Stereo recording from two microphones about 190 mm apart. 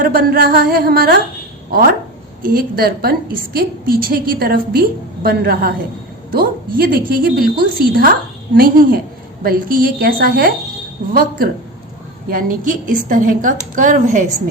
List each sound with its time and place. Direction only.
0.0 s a woman's voice: 50° right (ahead or behind)